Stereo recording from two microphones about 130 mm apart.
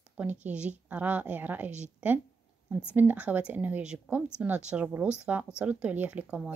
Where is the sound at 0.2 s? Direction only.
10° right (ahead or behind).